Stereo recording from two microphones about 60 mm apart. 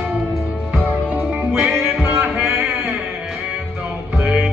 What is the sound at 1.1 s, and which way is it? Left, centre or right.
Music, right.